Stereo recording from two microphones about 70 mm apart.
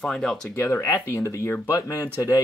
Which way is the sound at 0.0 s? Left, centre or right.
Centre.